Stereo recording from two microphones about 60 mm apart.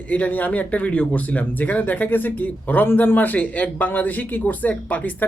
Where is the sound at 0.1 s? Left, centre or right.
Left.